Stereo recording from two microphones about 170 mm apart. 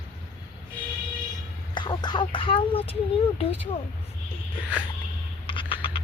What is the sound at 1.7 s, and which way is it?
Speech, 25° left (ahead or behind).